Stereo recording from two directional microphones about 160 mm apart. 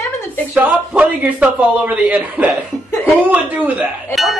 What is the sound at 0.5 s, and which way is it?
A man's voice, 10° right (ahead or behind).